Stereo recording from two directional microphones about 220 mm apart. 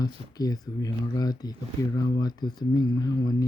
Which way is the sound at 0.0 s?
15° left (ahead or behind).